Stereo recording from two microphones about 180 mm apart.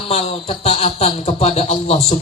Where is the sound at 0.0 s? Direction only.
35° left (ahead or behind).